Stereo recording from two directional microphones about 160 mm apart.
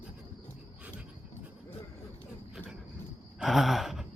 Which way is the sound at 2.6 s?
10° left (ahead or behind).